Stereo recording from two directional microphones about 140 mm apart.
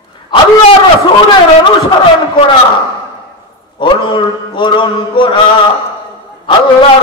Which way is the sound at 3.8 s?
35° left (ahead or behind).